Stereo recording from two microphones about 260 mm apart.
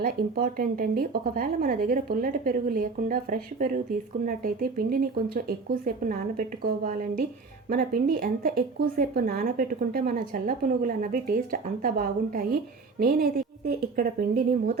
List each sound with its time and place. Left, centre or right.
0.0 s speech: right